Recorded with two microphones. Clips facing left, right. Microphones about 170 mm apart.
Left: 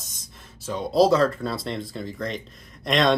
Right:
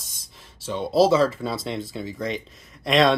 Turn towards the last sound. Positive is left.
turn(degrees=-5)  # may be behind; listen again after turning